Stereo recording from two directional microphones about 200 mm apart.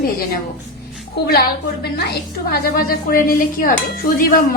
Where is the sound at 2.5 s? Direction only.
50° left (ahead or behind).